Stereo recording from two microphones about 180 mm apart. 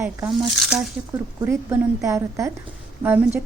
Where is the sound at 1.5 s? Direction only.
15° right (ahead or behind).